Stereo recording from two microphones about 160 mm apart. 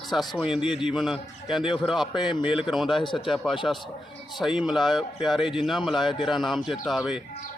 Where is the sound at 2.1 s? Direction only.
30° left (ahead or behind).